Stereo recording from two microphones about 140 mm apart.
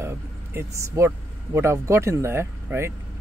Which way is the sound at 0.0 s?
20° right (ahead or behind).